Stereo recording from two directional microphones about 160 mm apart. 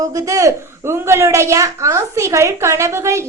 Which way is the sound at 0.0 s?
20° right (ahead or behind).